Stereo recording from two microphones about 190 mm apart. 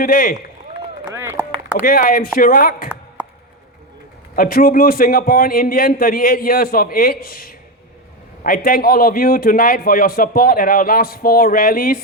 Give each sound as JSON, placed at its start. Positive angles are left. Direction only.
{"t": 0.0, "sound": "a man's voice", "side_deg": 50}
{"t": 1.1, "sound": "chop", "side_deg": -15}
{"t": 1.8, "sound": "a man's voice", "side_deg": 50}
{"t": 4.4, "sound": "a man's voice", "side_deg": 50}